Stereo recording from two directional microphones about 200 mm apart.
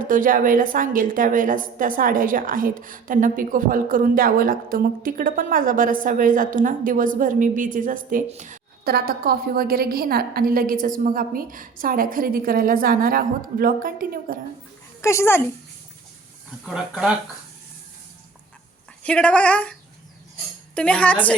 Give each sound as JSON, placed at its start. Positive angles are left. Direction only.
{"t": 0.1, "sound": "a woman's voice", "side_deg": -40}
{"t": 8.8, "sound": "a woman's voice", "side_deg": -50}
{"t": 15.0, "sound": "a woman's voice", "side_deg": 15}
{"t": 16.6, "sound": "speech", "side_deg": -5}
{"t": 19.0, "sound": "speech", "side_deg": 5}
{"t": 20.7, "sound": "a woman's voice", "side_deg": 5}